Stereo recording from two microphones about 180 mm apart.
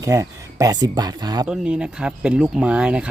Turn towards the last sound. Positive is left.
turn(degrees=-5)  # may be behind; listen again after turning